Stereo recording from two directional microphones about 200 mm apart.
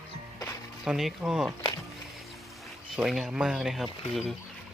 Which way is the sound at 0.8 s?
5° right (ahead or behind).